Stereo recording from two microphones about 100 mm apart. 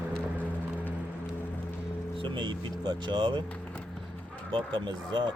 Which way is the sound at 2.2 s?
50° right (ahead or behind).